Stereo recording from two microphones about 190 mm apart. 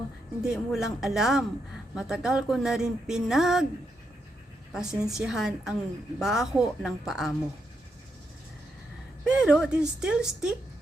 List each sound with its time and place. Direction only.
0.4 s a woman's voice: centre (ahead or behind)
4.7 s a woman's voice: 5° right (ahead or behind)
9.2 s a woman's voice: 5° right (ahead or behind)